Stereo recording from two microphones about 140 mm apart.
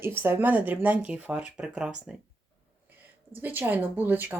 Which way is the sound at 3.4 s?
15° right (ahead or behind).